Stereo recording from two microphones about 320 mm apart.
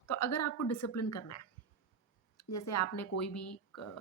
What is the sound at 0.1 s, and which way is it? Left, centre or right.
A woman's voice, left.